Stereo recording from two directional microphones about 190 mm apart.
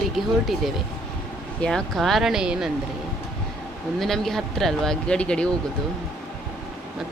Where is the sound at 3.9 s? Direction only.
Centre (ahead or behind).